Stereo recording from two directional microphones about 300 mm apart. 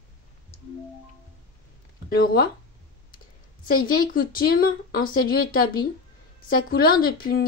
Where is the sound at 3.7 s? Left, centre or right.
Left.